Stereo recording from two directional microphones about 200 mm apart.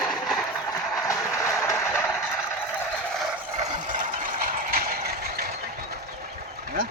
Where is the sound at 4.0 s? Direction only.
45° right (ahead or behind).